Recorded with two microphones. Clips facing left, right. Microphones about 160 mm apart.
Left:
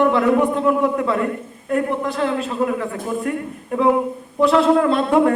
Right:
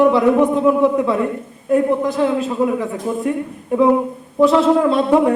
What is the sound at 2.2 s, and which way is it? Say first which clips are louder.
A man's voice: right 4 dB; 5° right (ahead or behind).